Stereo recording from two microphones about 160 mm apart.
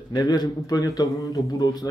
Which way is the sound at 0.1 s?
25° left (ahead or behind).